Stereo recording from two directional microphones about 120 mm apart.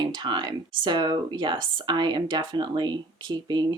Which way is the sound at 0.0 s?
40° right (ahead or behind).